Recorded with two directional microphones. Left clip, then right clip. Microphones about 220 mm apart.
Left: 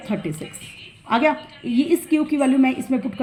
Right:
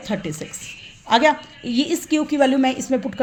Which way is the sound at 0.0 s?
40° right (ahead or behind).